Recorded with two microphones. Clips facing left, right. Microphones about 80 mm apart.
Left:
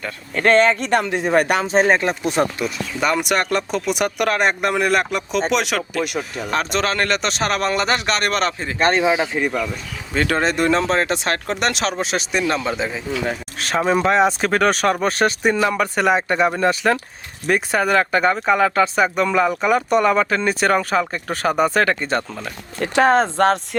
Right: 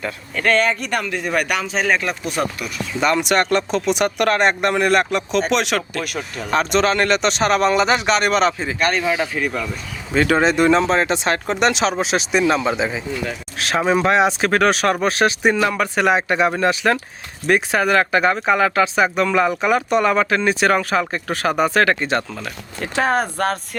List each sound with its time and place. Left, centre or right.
0.3 s speech: left
3.0 s speech: centre
8.8 s speech: left
10.2 s speech: centre
23.1 s speech: left